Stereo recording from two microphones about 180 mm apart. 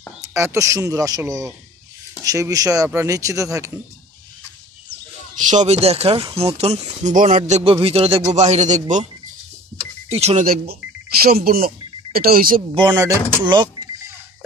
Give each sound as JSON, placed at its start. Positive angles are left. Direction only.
{"t": 0.2, "sound": "speech", "side_deg": -15}
{"t": 5.4, "sound": "speech", "side_deg": -40}
{"t": 10.0, "sound": "speech", "side_deg": -35}
{"t": 10.4, "sound": "speech", "side_deg": -55}
{"t": 12.7, "sound": "speech", "side_deg": -20}